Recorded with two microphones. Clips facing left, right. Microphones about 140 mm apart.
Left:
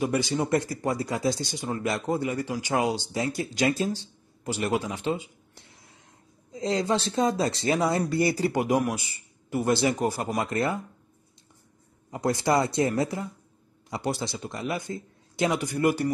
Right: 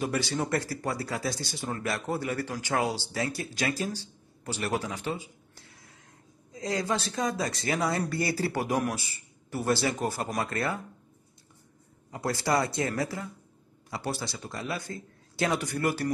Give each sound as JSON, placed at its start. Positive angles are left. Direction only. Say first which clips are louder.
{"t": 0.0, "sound": "a man's voice", "louder": "left 4 dB", "side_deg": 15}
{"t": 12.1, "sound": "a man's voice", "louder": "left 4 dB", "side_deg": 20}